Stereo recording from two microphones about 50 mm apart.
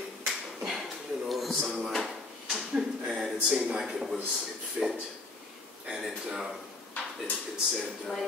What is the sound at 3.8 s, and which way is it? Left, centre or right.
Speech, centre.